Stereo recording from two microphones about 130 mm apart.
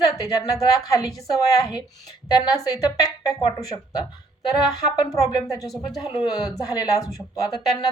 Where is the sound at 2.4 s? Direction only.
30° left (ahead or behind).